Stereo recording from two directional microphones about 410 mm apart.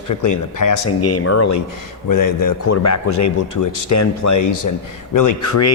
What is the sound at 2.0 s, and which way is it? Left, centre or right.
Speech, left.